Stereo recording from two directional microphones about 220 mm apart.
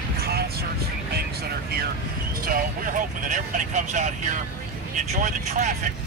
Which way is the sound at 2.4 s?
40° right (ahead or behind).